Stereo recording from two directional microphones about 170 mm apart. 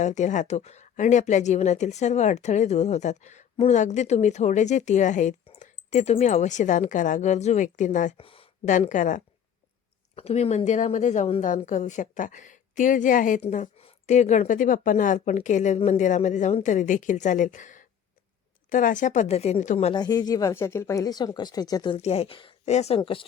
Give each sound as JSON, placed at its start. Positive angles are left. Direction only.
{"t": 0.0, "sound": "speech", "side_deg": 45}
{"t": 8.2, "sound": "a sound", "side_deg": 35}
{"t": 8.6, "sound": "speech", "side_deg": 45}
{"t": 10.2, "sound": "speech", "side_deg": 35}
{"t": 19.9, "sound": "speech", "side_deg": 25}
{"t": 21.9, "sound": "a woman's voice", "side_deg": 35}